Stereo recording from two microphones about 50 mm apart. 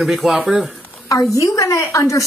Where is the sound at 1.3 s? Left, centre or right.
Left.